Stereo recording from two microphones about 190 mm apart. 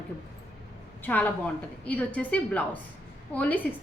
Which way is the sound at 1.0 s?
10° left (ahead or behind).